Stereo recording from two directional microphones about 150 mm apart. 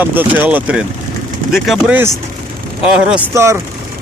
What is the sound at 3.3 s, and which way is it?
Speech, 20° right (ahead or behind).